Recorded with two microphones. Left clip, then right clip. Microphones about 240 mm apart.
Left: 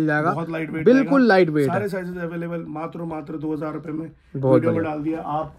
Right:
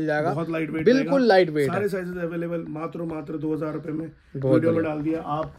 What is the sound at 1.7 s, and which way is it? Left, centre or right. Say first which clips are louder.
A man's voice: left 1 dB; centre.